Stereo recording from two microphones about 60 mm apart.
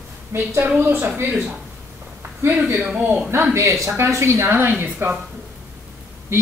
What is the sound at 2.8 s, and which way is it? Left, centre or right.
Speech, right.